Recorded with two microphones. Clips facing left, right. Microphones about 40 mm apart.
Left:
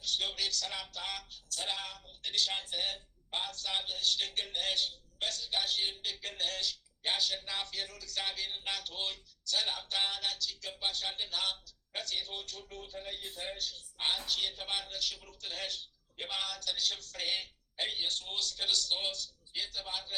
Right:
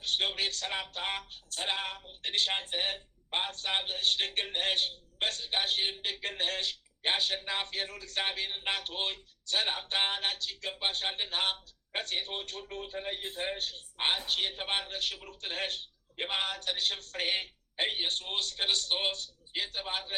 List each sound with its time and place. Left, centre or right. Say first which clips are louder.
0.0 s speech: right 4 dB; right